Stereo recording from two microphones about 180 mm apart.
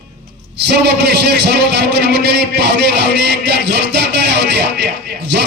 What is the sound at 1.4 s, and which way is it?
A man's voice, 65° right (ahead or behind).